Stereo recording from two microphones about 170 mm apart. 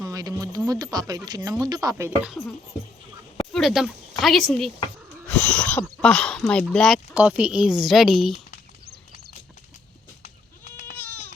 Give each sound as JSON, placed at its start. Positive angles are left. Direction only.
{"t": 0.0, "sound": "speech", "side_deg": -20}
{"t": 3.5, "sound": "speech", "side_deg": 0}
{"t": 5.2, "sound": "cat", "side_deg": 5}
{"t": 5.8, "sound": "speech", "side_deg": 5}
{"t": 10.2, "sound": "goat", "side_deg": 45}